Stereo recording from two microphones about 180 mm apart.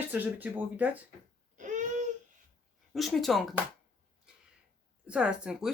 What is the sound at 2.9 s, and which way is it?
Speech, centre (ahead or behind).